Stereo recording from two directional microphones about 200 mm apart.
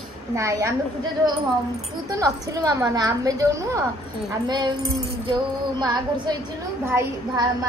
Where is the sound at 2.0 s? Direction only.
15° right (ahead or behind).